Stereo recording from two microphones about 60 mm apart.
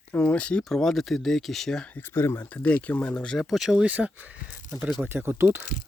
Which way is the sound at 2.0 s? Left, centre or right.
Left.